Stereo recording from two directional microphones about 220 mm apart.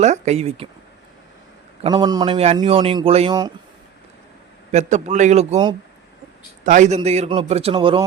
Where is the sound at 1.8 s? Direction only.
20° right (ahead or behind).